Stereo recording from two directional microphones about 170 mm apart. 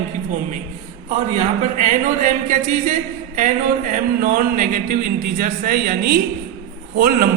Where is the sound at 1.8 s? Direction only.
45° right (ahead or behind).